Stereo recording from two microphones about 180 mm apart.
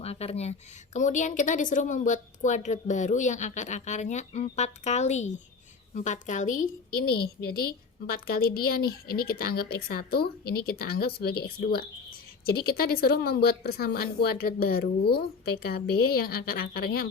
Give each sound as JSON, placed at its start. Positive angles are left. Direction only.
{"t": 0.0, "sound": "speech", "side_deg": 35}
{"t": 8.0, "sound": "a woman's voice", "side_deg": 60}